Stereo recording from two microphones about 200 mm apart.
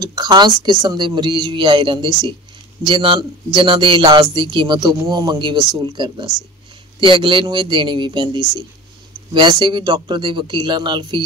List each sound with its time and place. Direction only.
0.0 s speech: 20° right (ahead or behind)